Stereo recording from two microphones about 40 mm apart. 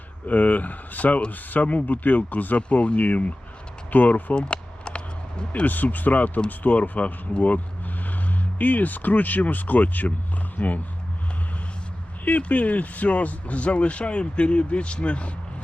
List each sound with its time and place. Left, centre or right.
0.3 s speech: left
2.6 s speech: left
4.4 s a sound: left
5.6 s speech: left
10.6 s speech: left
12.4 s speech: left